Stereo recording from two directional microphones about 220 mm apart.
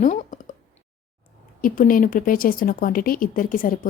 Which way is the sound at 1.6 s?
40° left (ahead or behind).